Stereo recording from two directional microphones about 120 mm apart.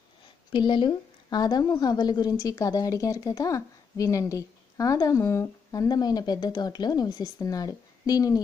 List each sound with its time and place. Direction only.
0.5 s a woman's voice: 40° left (ahead or behind)